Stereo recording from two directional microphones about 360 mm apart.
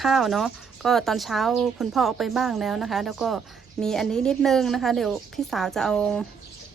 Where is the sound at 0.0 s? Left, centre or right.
Centre.